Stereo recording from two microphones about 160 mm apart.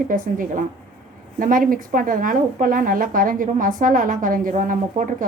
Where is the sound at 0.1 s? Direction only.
55° right (ahead or behind).